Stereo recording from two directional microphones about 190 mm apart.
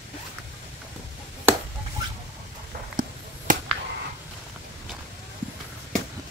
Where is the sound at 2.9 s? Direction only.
45° right (ahead or behind).